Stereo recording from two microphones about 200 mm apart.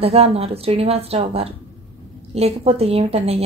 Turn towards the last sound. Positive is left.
turn(degrees=-30)  # may be behind; listen again after turning